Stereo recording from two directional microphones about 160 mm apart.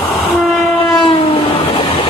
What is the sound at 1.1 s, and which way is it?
Train, 40° left (ahead or behind).